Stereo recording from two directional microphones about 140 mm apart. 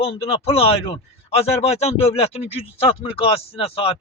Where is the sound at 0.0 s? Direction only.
45° left (ahead or behind).